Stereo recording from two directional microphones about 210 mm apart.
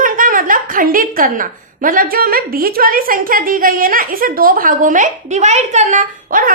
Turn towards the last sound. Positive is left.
turn(degrees=-40)  # may be behind; listen again after turning